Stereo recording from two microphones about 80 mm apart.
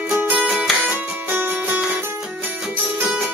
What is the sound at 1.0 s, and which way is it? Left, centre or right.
Music, right.